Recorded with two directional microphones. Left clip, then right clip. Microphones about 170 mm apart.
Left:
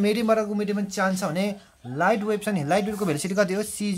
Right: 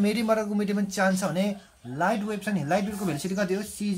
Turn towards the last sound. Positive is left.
turn(degrees=50)  # may be behind; listen again after turning